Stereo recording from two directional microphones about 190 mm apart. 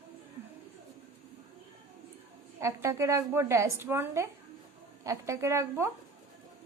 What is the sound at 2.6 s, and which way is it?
A woman's voice, 15° right (ahead or behind).